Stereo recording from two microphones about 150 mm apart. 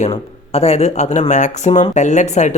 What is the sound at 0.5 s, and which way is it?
Speech, 45° left (ahead or behind).